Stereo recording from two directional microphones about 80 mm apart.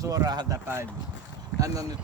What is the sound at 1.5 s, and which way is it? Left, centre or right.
Speech, right.